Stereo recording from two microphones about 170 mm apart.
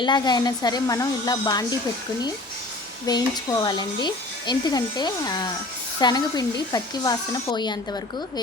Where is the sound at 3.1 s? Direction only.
25° left (ahead or behind).